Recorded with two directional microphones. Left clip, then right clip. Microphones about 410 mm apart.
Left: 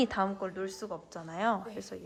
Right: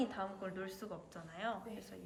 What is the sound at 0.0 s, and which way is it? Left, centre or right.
A woman's voice, centre.